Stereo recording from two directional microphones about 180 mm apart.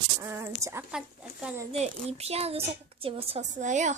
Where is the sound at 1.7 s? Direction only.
35° right (ahead or behind).